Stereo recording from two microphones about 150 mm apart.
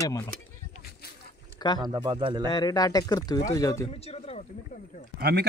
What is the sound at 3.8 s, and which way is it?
Speech, 40° left (ahead or behind).